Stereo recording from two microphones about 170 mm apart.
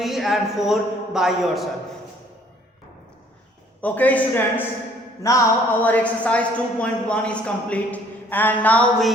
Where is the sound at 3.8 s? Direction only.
10° left (ahead or behind).